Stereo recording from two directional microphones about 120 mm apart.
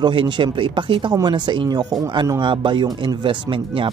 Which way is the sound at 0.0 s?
40° right (ahead or behind).